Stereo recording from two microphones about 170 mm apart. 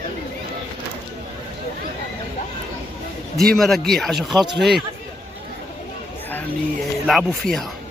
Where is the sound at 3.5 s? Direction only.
Centre (ahead or behind).